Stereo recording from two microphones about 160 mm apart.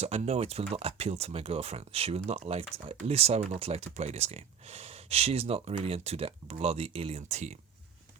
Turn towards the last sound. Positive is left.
turn(degrees=-45)  # may be behind; listen again after turning